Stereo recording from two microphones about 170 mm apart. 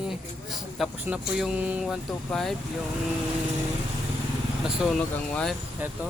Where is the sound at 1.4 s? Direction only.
5° right (ahead or behind).